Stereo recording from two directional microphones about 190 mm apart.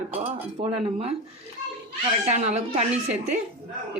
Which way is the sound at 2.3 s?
35° right (ahead or behind).